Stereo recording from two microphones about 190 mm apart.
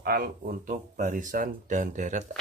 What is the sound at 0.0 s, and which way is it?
Speech, 50° right (ahead or behind).